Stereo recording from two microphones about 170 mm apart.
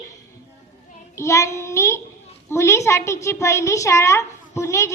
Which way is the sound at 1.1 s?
15° left (ahead or behind).